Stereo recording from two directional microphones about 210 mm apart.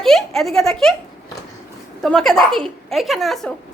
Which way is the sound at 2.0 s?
5° left (ahead or behind).